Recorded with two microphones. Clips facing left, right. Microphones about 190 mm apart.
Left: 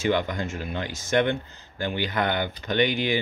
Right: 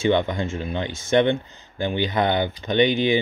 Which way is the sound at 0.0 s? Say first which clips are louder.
Right 4 dB; 25° right (ahead or behind).